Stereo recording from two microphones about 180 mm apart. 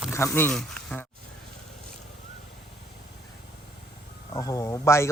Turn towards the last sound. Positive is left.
turn(degrees=15)  # may be behind; listen again after turning